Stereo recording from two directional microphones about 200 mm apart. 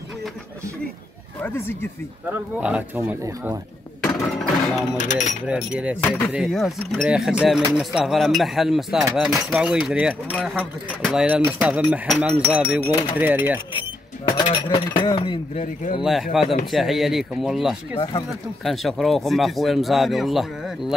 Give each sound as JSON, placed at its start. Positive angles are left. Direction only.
{"t": 1.4, "sound": "speech", "side_deg": 10}
{"t": 2.2, "sound": "speech", "side_deg": -5}
{"t": 4.0, "sound": "music", "side_deg": 0}
{"t": 4.9, "sound": "speech", "side_deg": 35}
{"t": 5.5, "sound": "speech", "side_deg": -5}
{"t": 6.0, "sound": "speech", "side_deg": 10}
{"t": 6.3, "sound": "speech", "side_deg": 0}
{"t": 14.4, "sound": "cutlery", "side_deg": 25}
{"t": 15.6, "sound": "speech", "side_deg": 40}
{"t": 16.0, "sound": "speech", "side_deg": 0}